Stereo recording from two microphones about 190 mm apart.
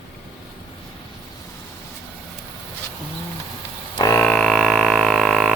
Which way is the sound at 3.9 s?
15° left (ahead or behind).